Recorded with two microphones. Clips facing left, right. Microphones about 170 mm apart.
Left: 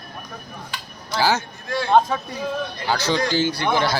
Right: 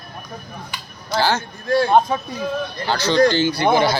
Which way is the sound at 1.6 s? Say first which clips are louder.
Right 8 dB; 40° right (ahead or behind).